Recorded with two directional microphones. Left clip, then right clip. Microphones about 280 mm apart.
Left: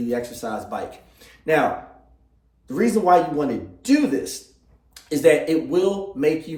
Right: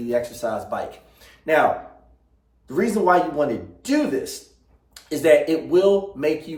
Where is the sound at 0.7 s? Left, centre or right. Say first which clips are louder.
Right 2 dB; centre.